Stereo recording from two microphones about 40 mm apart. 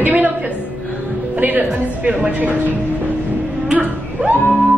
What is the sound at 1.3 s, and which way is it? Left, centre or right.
Speech, right.